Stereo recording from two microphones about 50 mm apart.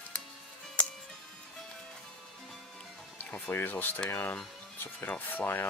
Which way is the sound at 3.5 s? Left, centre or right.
Left.